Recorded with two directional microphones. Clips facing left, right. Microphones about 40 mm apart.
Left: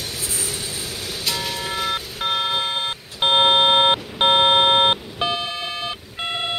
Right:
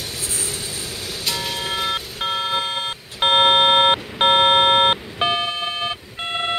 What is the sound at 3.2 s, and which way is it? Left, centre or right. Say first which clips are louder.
Beep: right 1 dB; right.